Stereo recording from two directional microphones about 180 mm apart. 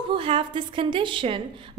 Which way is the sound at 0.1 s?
30° right (ahead or behind).